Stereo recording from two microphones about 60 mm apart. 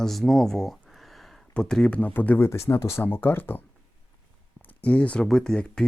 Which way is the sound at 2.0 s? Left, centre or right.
Left.